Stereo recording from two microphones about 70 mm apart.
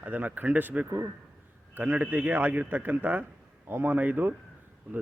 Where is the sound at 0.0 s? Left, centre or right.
Right.